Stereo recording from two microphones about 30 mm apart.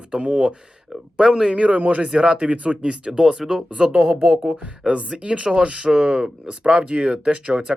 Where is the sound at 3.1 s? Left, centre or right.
Right.